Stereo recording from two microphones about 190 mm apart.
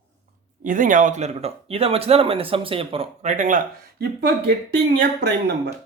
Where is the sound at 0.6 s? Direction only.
45° right (ahead or behind).